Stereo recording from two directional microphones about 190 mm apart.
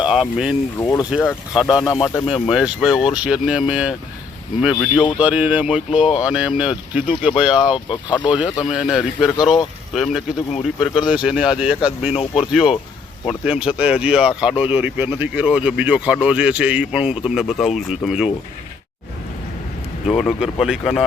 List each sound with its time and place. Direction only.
0.0 s speech: 5° right (ahead or behind)
0.8 s speech: 20° left (ahead or behind)
1.1 s speech: 5° right (ahead or behind)
7.9 s speech: 25° left (ahead or behind)
8.6 s speech: centre (ahead or behind)
20.1 s speech: centre (ahead or behind)